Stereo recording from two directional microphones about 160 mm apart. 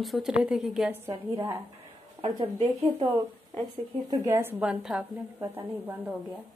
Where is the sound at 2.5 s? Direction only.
35° right (ahead or behind).